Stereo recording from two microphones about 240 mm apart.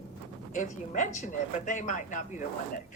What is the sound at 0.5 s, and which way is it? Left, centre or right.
A woman's voice, left.